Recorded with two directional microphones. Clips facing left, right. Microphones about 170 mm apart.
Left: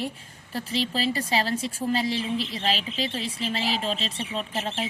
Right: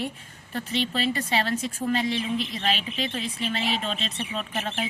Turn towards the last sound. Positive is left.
turn(degrees=30)  # may be behind; listen again after turning